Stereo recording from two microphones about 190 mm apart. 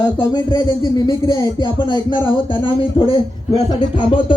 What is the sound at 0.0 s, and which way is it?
A man's voice, 20° left (ahead or behind).